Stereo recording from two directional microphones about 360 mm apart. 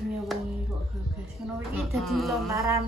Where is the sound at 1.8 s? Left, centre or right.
Centre.